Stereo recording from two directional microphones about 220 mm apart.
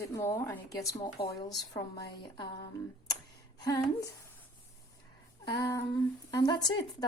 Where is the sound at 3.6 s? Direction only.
15° left (ahead or behind).